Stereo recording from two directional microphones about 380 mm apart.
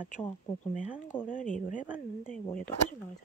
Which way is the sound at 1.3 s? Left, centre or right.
Left.